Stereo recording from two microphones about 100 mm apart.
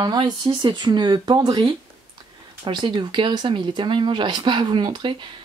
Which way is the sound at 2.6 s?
50° right (ahead or behind).